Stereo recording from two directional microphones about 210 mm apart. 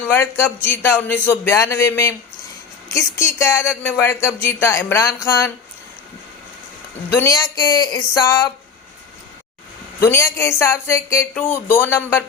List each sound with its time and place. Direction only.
0.0 s speech: 10° left (ahead or behind)
7.2 s speech: 15° left (ahead or behind)
10.0 s speech: 10° left (ahead or behind)